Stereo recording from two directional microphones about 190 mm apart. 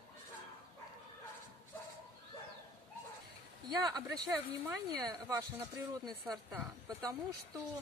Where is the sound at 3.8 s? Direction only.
20° right (ahead or behind).